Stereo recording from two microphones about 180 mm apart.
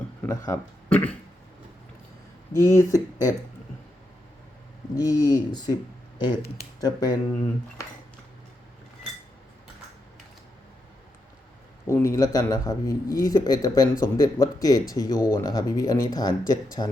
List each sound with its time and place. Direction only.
0.2 s speech: 15° left (ahead or behind)
2.6 s speech: 15° left (ahead or behind)
4.9 s speech: 20° left (ahead or behind)
11.9 s speech: 15° left (ahead or behind)